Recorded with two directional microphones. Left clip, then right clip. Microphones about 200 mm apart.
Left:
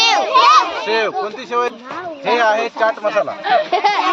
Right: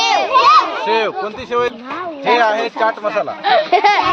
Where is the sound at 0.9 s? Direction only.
5° right (ahead or behind).